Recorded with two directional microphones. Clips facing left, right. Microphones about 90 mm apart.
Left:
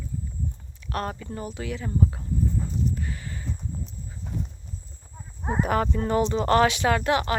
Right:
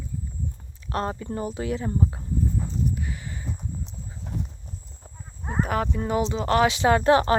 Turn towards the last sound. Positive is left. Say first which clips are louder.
# right 4 dB
turn(degrees=-30)  # may be behind; listen again after turning